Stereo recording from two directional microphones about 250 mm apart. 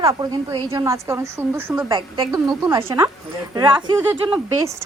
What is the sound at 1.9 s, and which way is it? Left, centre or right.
A woman's voice, centre.